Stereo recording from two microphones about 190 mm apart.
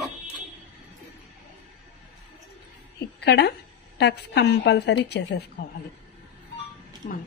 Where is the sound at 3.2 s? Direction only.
60° left (ahead or behind).